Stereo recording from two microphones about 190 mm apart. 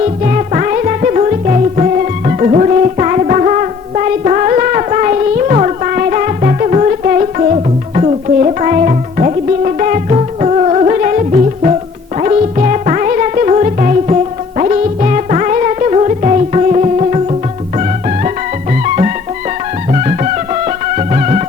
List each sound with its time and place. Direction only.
0.0 s music: 40° right (ahead or behind)
18.7 s music: 40° right (ahead or behind)